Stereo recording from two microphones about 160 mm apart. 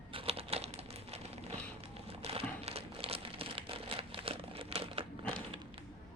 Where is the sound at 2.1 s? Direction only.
40° right (ahead or behind).